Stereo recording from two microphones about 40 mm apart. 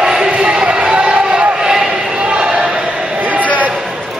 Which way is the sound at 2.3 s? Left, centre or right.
Right.